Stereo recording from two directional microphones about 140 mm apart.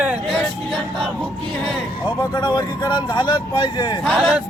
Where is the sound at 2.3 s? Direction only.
30° left (ahead or behind).